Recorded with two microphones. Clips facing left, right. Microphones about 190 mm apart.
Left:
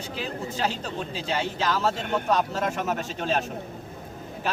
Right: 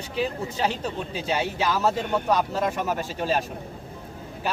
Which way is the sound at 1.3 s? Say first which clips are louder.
Right 2 dB; 10° right (ahead or behind).